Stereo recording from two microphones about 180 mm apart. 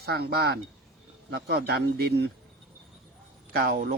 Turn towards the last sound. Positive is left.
turn(degrees=-55)  # may be behind; listen again after turning